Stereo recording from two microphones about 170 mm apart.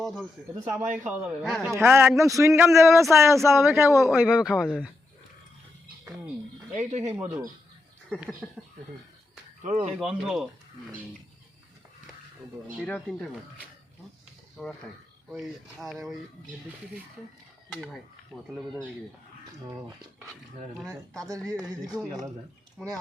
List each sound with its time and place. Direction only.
0.0 s speech: centre (ahead or behind)
1.8 s a man's voice: 10° right (ahead or behind)
4.1 s speech: 5° right (ahead or behind)
6.7 s speech: 40° right (ahead or behind)
7.1 s a man's voice: 5° right (ahead or behind)
8.4 s speech: 5° left (ahead or behind)
9.6 s speech: 35° right (ahead or behind)
10.0 s speech: 5° right (ahead or behind)
12.8 s speech: 5° left (ahead or behind)
14.6 s speech: centre (ahead or behind)
15.8 s speech: centre (ahead or behind)
18.5 s speech: 5° right (ahead or behind)
21.8 s speech: centre (ahead or behind)